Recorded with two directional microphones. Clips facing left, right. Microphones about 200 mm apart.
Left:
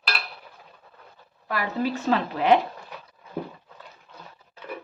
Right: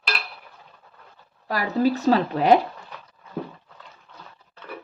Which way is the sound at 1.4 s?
35° right (ahead or behind).